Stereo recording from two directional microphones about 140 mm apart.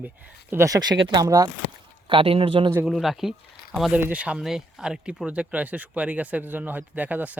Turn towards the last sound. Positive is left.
turn(degrees=-10)  # may be behind; listen again after turning